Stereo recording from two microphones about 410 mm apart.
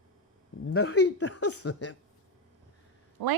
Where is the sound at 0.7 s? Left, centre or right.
Left.